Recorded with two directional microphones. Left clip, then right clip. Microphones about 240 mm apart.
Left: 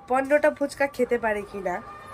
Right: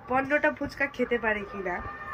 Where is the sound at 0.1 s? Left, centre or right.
Centre.